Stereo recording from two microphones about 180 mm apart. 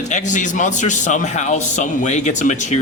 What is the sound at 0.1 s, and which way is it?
A man's voice, 40° left (ahead or behind).